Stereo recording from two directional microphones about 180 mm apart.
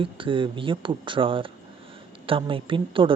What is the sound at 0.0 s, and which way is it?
Speech, 30° right (ahead or behind).